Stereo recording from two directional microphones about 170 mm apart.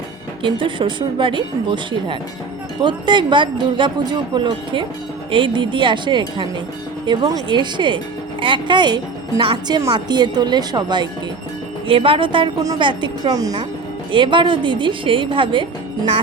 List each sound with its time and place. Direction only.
0.4 s speech: 30° right (ahead or behind)